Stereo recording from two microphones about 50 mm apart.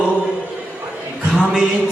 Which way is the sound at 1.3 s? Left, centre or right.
Centre.